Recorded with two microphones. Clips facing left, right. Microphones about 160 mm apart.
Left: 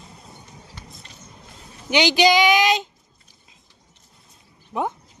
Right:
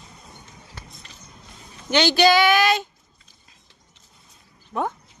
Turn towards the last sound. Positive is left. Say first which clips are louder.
# left 1 dB
turn(degrees=15)  # may be behind; listen again after turning